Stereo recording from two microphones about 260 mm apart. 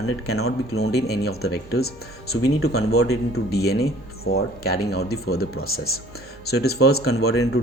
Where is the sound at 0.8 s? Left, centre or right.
Left.